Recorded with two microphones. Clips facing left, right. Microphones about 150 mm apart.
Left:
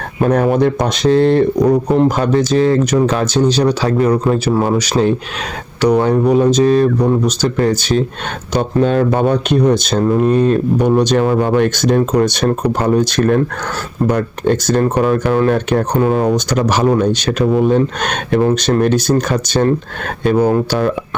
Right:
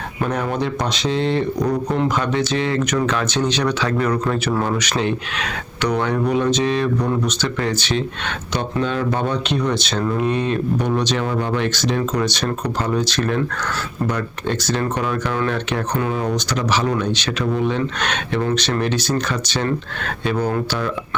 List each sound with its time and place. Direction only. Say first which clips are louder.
0.2 s speech: left 9 dB; 45° left (ahead or behind)
1.9 s speech: left 7 dB; 40° left (ahead or behind)